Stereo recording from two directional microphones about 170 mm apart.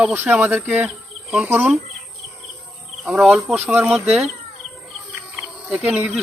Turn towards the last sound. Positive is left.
turn(degrees=-5)  # may be behind; listen again after turning